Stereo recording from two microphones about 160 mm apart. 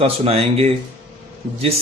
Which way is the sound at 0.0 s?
40° right (ahead or behind).